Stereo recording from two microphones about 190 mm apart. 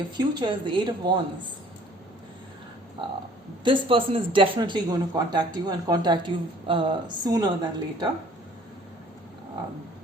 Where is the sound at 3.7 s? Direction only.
30° right (ahead or behind).